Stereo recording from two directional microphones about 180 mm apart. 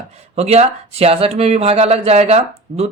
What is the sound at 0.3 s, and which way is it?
Speech, 35° right (ahead or behind).